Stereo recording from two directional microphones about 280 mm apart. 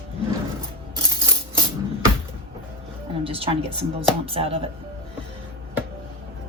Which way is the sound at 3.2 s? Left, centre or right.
Centre.